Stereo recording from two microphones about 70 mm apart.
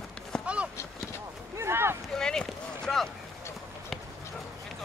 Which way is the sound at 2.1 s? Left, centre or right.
Centre.